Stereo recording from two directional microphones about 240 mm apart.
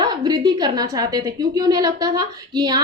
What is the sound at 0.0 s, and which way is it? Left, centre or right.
A woman's voice, centre.